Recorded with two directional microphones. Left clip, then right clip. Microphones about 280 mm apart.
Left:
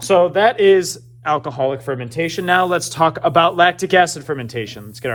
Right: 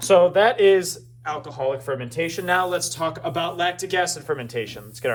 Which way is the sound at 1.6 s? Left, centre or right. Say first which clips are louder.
Left 5 dB; left.